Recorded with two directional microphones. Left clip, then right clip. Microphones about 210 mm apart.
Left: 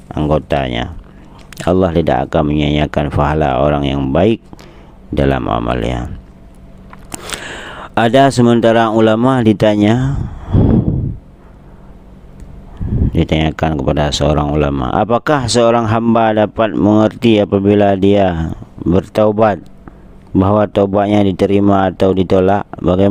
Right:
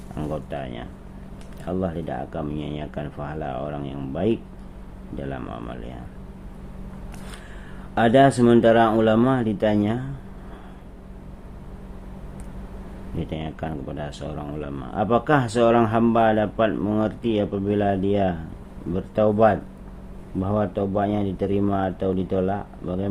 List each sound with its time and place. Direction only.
0.1 s speech: 40° left (ahead or behind)
7.3 s speech: 50° left (ahead or behind)
13.1 s speech: 45° left (ahead or behind)